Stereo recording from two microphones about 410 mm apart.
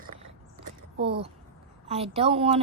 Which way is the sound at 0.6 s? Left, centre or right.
Right.